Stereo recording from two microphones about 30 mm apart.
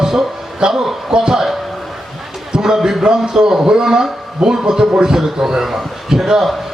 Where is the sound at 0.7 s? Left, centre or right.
Centre.